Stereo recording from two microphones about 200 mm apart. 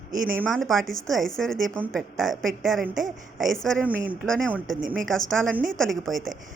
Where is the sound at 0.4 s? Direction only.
Centre (ahead or behind).